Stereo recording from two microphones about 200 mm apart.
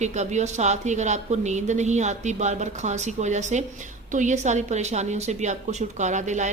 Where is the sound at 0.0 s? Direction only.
35° right (ahead or behind).